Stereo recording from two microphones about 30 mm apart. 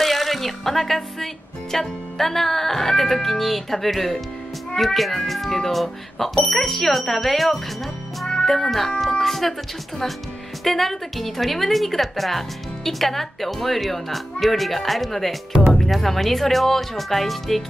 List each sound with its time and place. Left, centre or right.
0.0 s a woman's voice: centre